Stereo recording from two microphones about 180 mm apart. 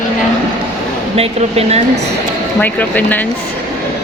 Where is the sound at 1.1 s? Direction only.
35° right (ahead or behind).